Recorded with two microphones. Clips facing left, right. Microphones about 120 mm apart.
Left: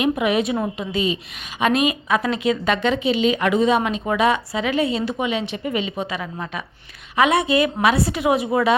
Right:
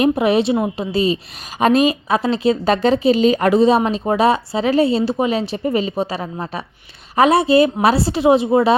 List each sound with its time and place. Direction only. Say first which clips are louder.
0.0 s a woman's voice: right 5 dB; 35° right (ahead or behind)